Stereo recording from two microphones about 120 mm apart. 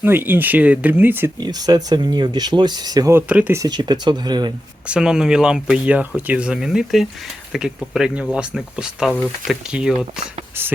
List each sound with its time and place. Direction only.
0.0 s speech: 20° right (ahead or behind)
1.4 s speech: 35° right (ahead or behind)
3.2 s speech: 15° right (ahead or behind)
3.6 s speech: 35° right (ahead or behind)
4.9 s speech: 5° right (ahead or behind)
10.5 s speech: 20° right (ahead or behind)